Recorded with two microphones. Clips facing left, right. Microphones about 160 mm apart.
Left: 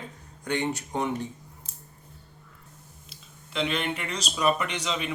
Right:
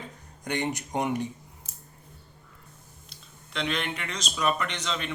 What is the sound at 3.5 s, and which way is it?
A man's voice, 5° left (ahead or behind).